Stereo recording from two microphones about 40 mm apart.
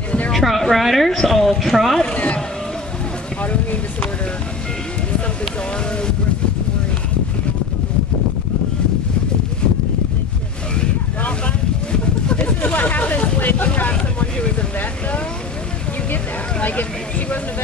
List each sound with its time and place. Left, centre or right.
0.3 s a woman's voice: centre
2.1 s speech: left
3.4 s a sound: left
11.9 s a sound: left
13.4 s speech: left
13.8 s speech: left